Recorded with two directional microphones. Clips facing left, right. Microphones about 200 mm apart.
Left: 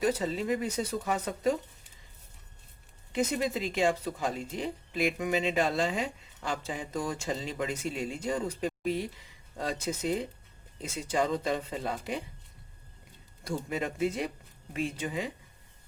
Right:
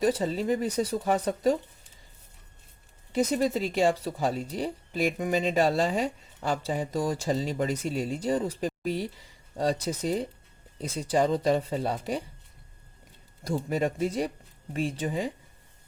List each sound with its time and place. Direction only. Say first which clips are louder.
0.1 s speech: right 3 dB; 30° right (ahead or behind)
3.1 s speech: right 4 dB; 35° right (ahead or behind)
13.4 s speech: right 5 dB; 35° right (ahead or behind)